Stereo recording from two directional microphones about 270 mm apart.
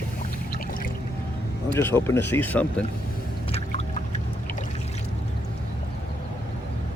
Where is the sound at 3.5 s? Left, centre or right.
Left.